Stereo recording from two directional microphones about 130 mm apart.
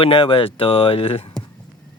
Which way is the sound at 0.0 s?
45° left (ahead or behind).